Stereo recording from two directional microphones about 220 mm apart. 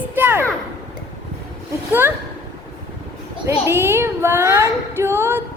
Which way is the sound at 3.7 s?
10° right (ahead or behind).